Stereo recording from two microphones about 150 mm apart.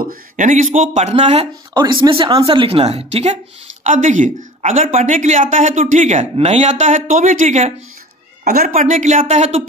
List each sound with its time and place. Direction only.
0.0 s speech: 65° right (ahead or behind); by 1.5 s 45° right (ahead or behind)
1.7 s a woman's voice: 30° right (ahead or behind)
3.8 s speech: 55° right (ahead or behind)
8.5 s speech: 70° right (ahead or behind); by 9.6 s 50° right (ahead or behind)